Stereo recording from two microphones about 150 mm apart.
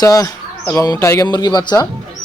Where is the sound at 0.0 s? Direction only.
20° left (ahead or behind).